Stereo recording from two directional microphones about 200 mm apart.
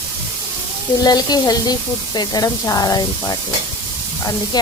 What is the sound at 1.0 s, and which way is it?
Speech, 20° left (ahead or behind).